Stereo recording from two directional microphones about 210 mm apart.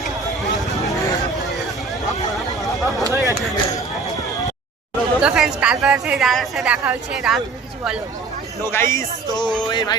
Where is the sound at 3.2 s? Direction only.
15° left (ahead or behind).